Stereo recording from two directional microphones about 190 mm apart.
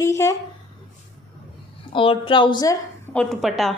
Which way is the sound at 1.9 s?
25° left (ahead or behind).